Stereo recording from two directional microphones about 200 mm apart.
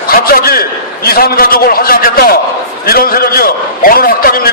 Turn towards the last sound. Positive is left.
turn(degrees=50)  # may be behind; listen again after turning